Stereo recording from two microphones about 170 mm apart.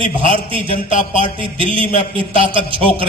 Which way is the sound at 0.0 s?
30° right (ahead or behind).